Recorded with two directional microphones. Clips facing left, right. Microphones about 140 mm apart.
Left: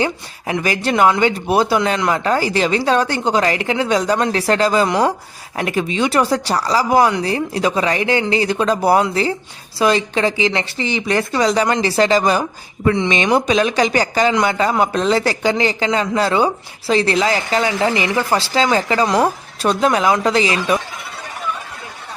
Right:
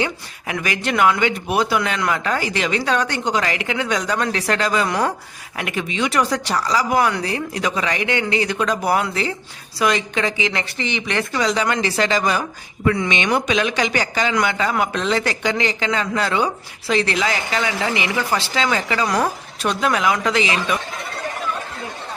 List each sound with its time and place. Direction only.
0.0 s speech: 30° left (ahead or behind)
5.5 s speech: 35° left (ahead or behind)